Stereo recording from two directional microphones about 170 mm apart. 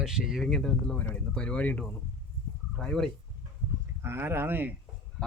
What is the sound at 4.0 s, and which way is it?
Speech, 15° right (ahead or behind).